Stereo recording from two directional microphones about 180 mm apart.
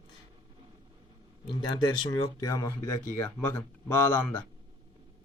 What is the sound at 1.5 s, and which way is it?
A man's voice, 25° left (ahead or behind).